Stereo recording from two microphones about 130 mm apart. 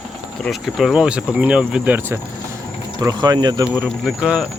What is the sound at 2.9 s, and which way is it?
Speech, 30° right (ahead or behind).